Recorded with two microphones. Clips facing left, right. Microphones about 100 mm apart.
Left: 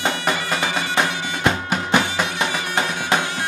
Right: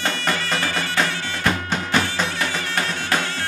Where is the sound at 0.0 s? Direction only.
15° left (ahead or behind).